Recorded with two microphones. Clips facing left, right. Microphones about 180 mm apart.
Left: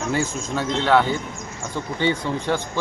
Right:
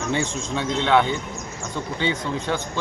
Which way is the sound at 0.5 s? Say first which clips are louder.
Left 1 dB; 5° left (ahead or behind).